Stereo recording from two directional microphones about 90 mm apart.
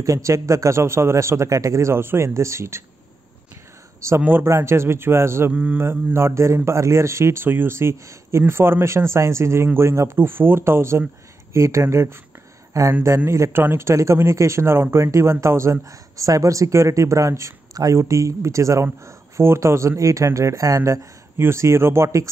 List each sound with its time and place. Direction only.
0.0 s speech: 35° right (ahead or behind)
4.2 s a man's voice: 25° right (ahead or behind)
5.5 s mantra: 15° right (ahead or behind)
5.8 s a man's voice: 25° right (ahead or behind)